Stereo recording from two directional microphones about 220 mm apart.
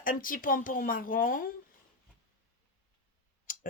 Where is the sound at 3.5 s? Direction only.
40° left (ahead or behind).